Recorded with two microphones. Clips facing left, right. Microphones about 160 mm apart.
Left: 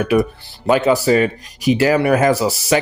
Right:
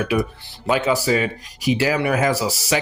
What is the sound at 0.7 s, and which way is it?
Speech, 50° left (ahead or behind).